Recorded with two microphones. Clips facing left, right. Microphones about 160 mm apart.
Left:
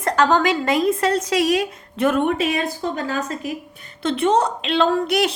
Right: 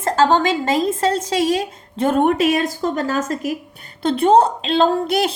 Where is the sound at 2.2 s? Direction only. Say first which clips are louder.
Right 4 dB; 45° right (ahead or behind).